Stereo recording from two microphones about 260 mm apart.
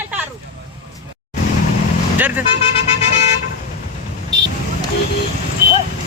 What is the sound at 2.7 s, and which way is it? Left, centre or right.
Vehicle, left.